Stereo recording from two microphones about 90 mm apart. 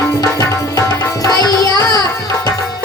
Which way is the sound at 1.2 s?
45° left (ahead or behind).